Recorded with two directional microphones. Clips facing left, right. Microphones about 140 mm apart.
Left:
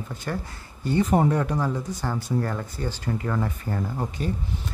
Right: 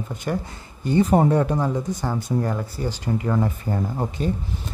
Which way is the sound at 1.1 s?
25° right (ahead or behind).